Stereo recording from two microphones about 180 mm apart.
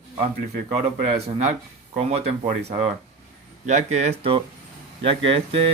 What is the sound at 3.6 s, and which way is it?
Speech, 40° right (ahead or behind).